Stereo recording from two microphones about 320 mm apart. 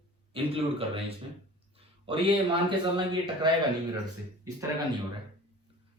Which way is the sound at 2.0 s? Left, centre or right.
Centre.